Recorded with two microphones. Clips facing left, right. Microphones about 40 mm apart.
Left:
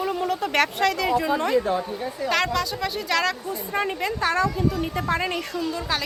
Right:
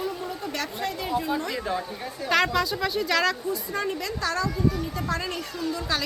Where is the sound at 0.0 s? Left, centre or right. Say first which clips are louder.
Left 6 dB; left.